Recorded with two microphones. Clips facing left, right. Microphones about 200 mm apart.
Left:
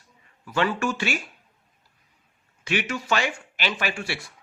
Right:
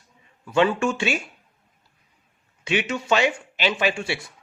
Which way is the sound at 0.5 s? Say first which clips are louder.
Right 4 dB; 20° right (ahead or behind).